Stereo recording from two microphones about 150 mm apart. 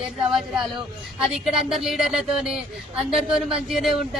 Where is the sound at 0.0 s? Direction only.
5° right (ahead or behind).